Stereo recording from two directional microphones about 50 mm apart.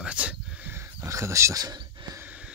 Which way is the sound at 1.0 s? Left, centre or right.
Right.